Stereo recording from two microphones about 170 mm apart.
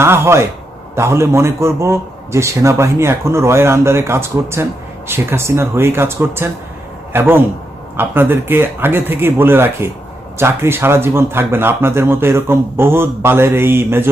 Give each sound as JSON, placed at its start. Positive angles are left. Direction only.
{"t": 0.0, "sound": "speech", "side_deg": -15}